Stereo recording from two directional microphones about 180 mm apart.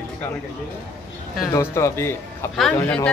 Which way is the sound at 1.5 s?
15° left (ahead or behind).